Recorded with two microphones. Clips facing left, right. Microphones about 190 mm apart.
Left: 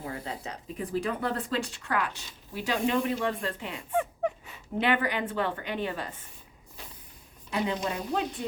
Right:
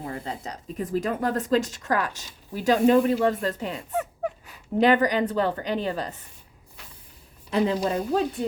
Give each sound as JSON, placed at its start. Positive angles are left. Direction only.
{"t": 0.4, "sound": "speech", "side_deg": -45}
{"t": 3.9, "sound": "a sound", "side_deg": 0}
{"t": 4.8, "sound": "speech", "side_deg": -40}
{"t": 7.5, "sound": "speech", "side_deg": -35}